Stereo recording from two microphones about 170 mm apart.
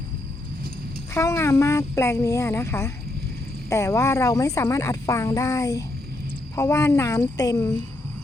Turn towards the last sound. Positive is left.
turn(degrees=20)  # may be behind; listen again after turning